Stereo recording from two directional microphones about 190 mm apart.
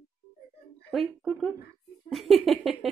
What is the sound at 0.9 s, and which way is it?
Speech, centre (ahead or behind).